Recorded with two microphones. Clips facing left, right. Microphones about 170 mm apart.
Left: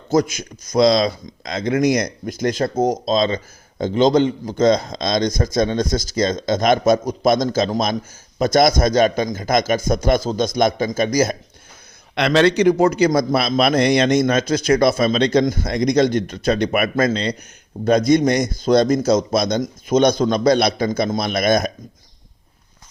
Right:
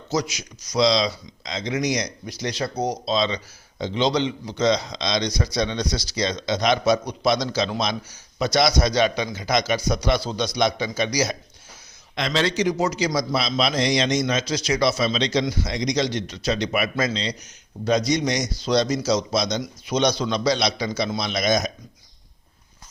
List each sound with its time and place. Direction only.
0.1 s a man's voice: 50° left (ahead or behind)
12.1 s a man's voice: 65° left (ahead or behind)